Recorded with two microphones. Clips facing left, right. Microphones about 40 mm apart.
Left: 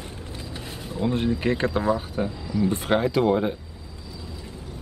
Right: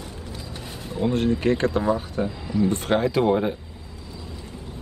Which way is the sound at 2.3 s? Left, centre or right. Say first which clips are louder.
Right 1 dB; right.